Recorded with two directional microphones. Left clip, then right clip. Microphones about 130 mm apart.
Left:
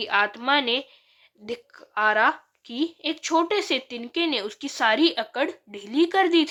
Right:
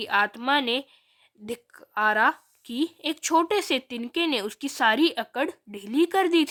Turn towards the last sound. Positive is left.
turn(degrees=-40)  # may be behind; listen again after turning